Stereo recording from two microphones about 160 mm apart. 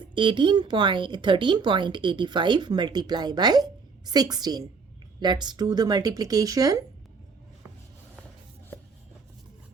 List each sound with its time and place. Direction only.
0.0 s speech: 30° right (ahead or behind)